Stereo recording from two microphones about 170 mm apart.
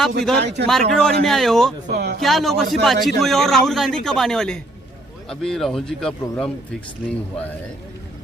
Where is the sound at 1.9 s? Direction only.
75° right (ahead or behind).